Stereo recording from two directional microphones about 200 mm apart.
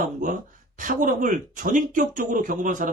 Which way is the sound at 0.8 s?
40° right (ahead or behind).